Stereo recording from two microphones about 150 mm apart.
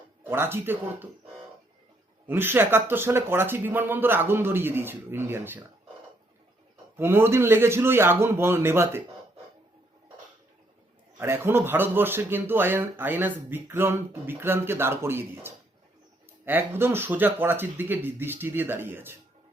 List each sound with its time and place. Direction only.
0.3 s speech: 15° right (ahead or behind)
2.2 s speech: 15° right (ahead or behind)
6.9 s speech: 15° right (ahead or behind)
11.2 s speech: 15° right (ahead or behind)